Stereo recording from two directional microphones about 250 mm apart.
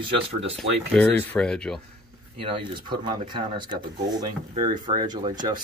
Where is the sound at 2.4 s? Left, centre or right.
Right.